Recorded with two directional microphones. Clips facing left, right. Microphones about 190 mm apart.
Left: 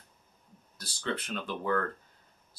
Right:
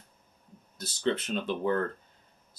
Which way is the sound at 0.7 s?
25° right (ahead or behind).